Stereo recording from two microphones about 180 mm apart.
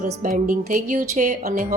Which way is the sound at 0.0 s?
45° right (ahead or behind).